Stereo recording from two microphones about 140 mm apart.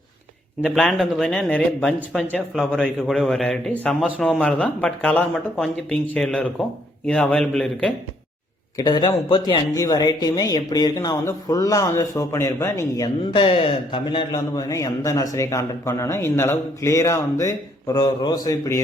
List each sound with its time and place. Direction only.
0.6 s speech: 5° left (ahead or behind)
8.8 s a man's voice: 30° left (ahead or behind)
13.3 s speech: 40° left (ahead or behind)
14.3 s a man's voice: 25° left (ahead or behind)